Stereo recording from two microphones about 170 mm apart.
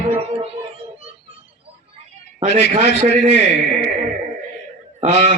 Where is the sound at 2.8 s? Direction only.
40° right (ahead or behind).